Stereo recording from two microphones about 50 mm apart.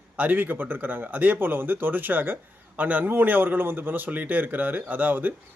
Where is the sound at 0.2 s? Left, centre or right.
Right.